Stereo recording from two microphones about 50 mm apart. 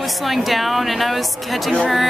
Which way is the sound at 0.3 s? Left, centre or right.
Centre.